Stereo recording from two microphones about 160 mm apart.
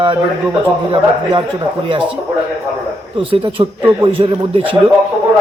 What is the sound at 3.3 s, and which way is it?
Speech, 35° right (ahead or behind).